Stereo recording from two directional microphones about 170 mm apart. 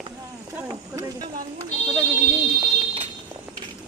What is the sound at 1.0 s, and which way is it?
Speech, 20° right (ahead or behind).